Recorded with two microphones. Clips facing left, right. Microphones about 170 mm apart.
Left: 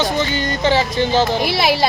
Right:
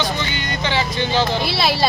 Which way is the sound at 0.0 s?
40° left (ahead or behind).